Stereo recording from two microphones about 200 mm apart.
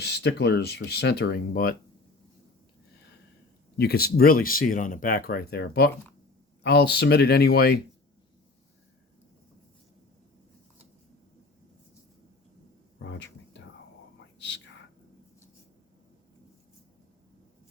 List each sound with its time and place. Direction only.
0.0 s speech: 55° left (ahead or behind)
3.8 s speech: 50° left (ahead or behind)
13.0 s a sound: 60° left (ahead or behind)
14.3 s whispering: 60° left (ahead or behind)